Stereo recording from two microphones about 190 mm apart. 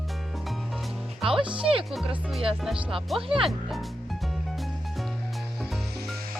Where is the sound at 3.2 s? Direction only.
30° right (ahead or behind).